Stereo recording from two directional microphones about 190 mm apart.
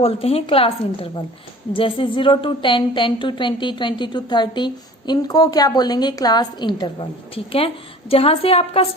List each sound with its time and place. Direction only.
0.0 s a woman's voice: 30° left (ahead or behind)